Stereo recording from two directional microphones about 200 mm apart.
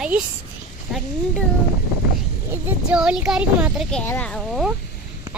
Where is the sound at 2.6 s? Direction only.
5° right (ahead or behind).